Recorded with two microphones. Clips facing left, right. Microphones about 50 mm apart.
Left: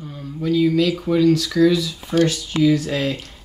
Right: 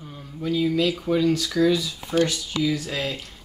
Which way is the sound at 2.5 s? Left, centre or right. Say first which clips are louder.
Left 7 dB; left.